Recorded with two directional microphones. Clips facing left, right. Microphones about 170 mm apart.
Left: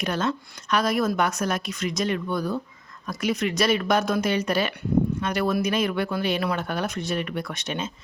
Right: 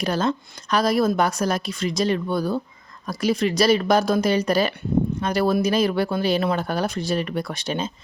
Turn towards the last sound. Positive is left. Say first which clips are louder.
# right 4 dB
turn(degrees=-35)  # may be behind; listen again after turning